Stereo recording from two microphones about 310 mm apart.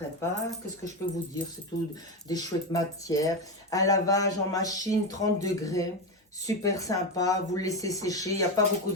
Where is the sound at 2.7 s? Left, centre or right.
Centre.